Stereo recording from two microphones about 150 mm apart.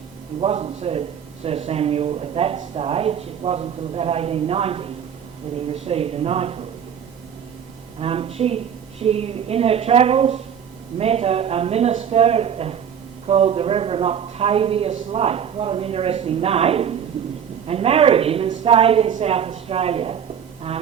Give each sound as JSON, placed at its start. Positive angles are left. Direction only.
{"t": 0.3, "sound": "a man's voice", "side_deg": -40}
{"t": 7.9, "sound": "a man's voice", "side_deg": -40}